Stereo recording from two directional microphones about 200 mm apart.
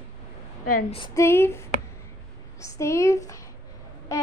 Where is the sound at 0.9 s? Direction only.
20° left (ahead or behind).